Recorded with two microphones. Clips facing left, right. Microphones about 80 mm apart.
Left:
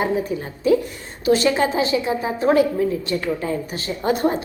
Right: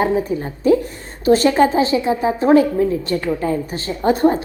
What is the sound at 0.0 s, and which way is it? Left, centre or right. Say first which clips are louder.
A woman's voice: right 4 dB; right.